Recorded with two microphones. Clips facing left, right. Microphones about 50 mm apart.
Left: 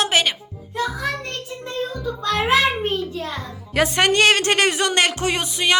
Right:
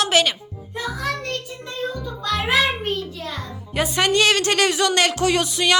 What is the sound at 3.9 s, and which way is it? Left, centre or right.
Speech, left.